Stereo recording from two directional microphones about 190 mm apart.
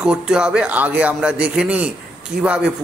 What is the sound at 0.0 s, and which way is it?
A man's voice, 5° right (ahead or behind).